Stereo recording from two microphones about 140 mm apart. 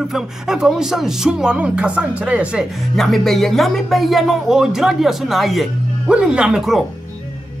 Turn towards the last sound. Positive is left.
turn(degrees=-5)  # may be behind; listen again after turning